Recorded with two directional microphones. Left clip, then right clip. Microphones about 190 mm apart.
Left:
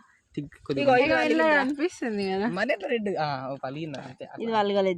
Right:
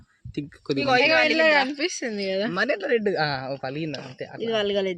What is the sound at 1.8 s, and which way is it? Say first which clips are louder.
Speech: right 1 dB; 50° left (ahead or behind).